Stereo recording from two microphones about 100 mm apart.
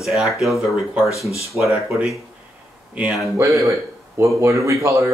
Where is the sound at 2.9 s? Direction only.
10° right (ahead or behind).